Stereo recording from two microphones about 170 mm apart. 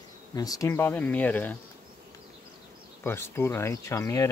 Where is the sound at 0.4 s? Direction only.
20° left (ahead or behind).